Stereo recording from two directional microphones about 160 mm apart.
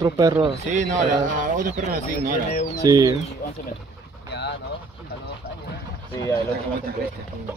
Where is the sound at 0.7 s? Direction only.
50° right (ahead or behind).